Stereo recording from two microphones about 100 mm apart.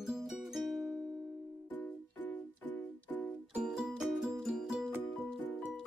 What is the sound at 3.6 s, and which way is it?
Music, 5° right (ahead or behind).